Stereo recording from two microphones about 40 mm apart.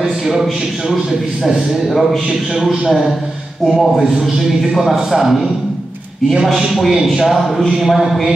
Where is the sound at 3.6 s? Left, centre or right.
Centre.